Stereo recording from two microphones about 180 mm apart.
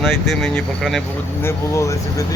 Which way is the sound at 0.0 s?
Centre (ahead or behind).